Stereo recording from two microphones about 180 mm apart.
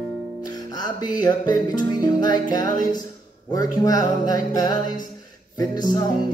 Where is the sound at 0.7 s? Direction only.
20° left (ahead or behind).